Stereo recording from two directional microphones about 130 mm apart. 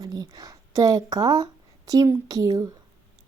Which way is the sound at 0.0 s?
30° right (ahead or behind).